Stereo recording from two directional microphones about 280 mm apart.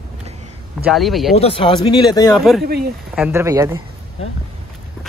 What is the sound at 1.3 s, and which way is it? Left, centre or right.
Speech, left.